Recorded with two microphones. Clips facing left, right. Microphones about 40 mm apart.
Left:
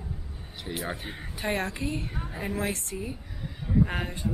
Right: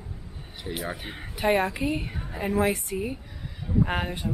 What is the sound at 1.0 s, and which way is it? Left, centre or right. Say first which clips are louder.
Speech: right 6 dB; centre.